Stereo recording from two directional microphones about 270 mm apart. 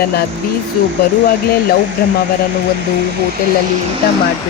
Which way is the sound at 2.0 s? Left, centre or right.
Left.